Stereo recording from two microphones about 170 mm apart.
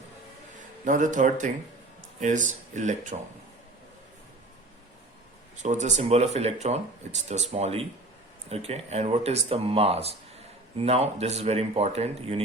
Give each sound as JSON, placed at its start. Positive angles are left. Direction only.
{"t": 0.9, "sound": "speech", "side_deg": -50}
{"t": 5.6, "sound": "speech", "side_deg": -45}